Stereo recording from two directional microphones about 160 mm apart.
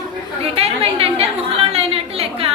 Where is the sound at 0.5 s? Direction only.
35° right (ahead or behind).